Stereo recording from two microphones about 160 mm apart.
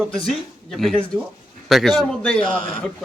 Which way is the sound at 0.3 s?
Centre (ahead or behind).